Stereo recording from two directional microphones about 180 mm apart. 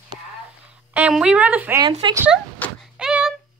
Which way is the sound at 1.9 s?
25° right (ahead or behind).